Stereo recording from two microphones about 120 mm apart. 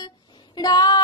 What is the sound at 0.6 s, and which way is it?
Child singing, 35° left (ahead or behind).